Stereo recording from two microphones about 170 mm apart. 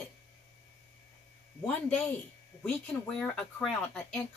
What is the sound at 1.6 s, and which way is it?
A woman's voice, 10° left (ahead or behind).